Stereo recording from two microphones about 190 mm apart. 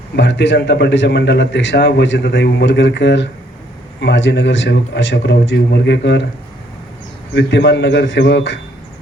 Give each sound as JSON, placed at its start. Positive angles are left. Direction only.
{"t": 0.2, "sound": "a man's voice", "side_deg": 70}
{"t": 7.3, "sound": "a man's voice", "side_deg": 65}